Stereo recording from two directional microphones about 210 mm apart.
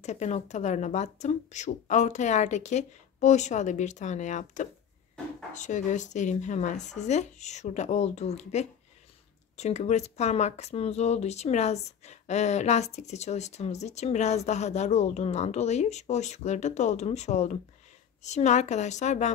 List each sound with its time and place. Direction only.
0.0 s speech: 35° left (ahead or behind)